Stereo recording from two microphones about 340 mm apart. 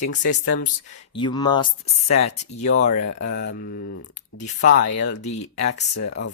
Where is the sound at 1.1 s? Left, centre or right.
Centre.